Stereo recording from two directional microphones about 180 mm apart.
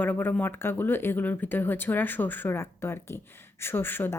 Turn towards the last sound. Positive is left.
turn(degrees=10)  # may be behind; listen again after turning